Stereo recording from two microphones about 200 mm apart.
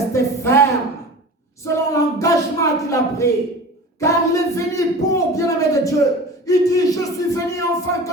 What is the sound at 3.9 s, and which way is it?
Speech, 15° left (ahead or behind).